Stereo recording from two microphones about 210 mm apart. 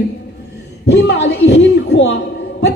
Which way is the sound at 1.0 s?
55° left (ahead or behind).